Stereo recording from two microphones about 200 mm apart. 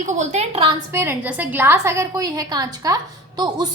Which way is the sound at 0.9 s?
10° right (ahead or behind).